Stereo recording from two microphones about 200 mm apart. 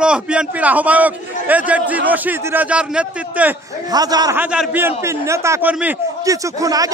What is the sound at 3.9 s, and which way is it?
Speech, 20° right (ahead or behind).